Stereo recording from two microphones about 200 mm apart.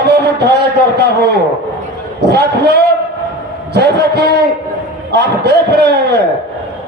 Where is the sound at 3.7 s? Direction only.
55° right (ahead or behind).